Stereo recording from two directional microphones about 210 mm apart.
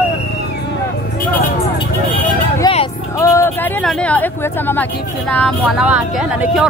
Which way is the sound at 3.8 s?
5° left (ahead or behind).